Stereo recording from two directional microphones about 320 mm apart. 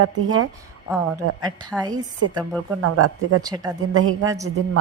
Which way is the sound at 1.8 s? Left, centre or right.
Centre.